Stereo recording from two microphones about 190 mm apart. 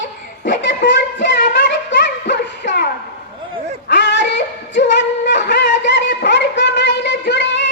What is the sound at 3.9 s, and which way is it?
Singing, 70° left (ahead or behind).